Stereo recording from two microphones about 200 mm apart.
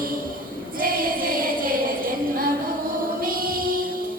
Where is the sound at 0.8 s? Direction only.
45° right (ahead or behind).